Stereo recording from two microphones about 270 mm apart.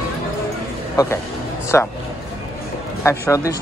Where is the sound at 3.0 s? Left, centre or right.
Centre.